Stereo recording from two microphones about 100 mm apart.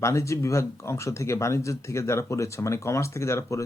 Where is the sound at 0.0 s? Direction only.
30° left (ahead or behind).